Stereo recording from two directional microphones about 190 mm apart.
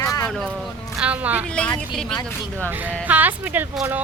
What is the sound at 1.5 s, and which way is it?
Speech, 5° left (ahead or behind).